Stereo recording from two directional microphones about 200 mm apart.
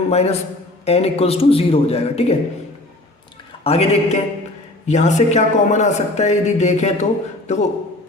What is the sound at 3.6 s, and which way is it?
A man's voice, 30° left (ahead or behind).